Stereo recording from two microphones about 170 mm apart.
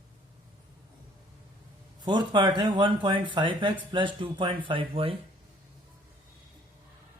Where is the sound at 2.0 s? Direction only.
25° right (ahead or behind).